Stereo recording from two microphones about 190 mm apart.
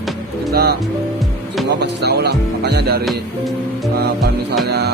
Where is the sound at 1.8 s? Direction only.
60° right (ahead or behind).